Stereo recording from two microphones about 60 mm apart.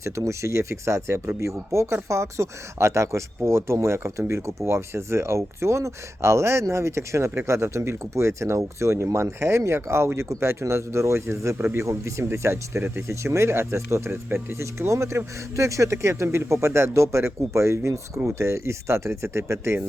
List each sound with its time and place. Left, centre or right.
0.0 s speech: right
11.5 s speech: right
11.9 s speech: right
14.1 s speech: right
14.6 s speech: right